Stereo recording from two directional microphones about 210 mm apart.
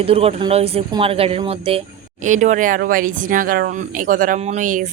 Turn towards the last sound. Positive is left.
turn(degrees=-40)  # may be behind; listen again after turning